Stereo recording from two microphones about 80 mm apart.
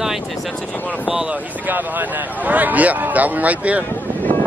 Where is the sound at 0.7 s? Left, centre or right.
Centre.